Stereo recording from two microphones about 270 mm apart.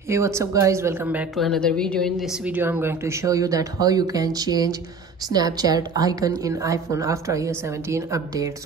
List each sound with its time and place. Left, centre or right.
0.1 s a woman's voice: centre